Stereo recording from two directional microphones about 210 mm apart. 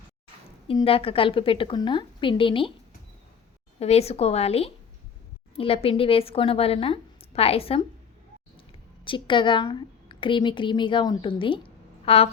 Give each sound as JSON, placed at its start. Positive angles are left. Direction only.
{"t": 0.7, "sound": "a woman's voice", "side_deg": 25}
{"t": 3.8, "sound": "a woman's voice", "side_deg": 30}
{"t": 9.0, "sound": "speech", "side_deg": 25}